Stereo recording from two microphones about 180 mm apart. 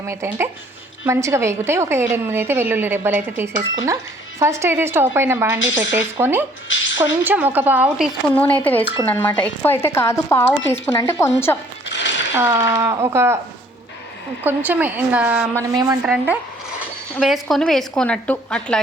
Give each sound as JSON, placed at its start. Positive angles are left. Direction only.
{"t": 0.1, "sound": "a woman's voice", "side_deg": -15}
{"t": 8.4, "sound": "speech", "side_deg": 10}
{"t": 11.9, "sound": "a sound", "side_deg": 85}
{"t": 12.4, "sound": "a woman's voice", "side_deg": -15}
{"t": 14.4, "sound": "a woman's voice", "side_deg": -10}
{"t": 15.7, "sound": "a woman's voice", "side_deg": -20}
{"t": 16.0, "sound": "a woman's voice", "side_deg": -5}